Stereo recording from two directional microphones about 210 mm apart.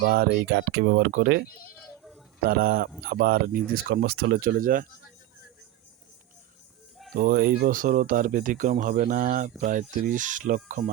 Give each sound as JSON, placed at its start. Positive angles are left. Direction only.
{"t": 0.0, "sound": "speech", "side_deg": -45}
{"t": 7.1, "sound": "speech", "side_deg": -50}